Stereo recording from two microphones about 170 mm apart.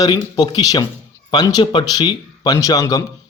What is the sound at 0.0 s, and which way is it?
Speech, 25° left (ahead or behind).